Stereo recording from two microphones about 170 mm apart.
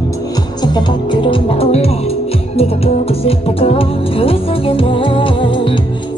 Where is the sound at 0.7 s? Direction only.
30° left (ahead or behind).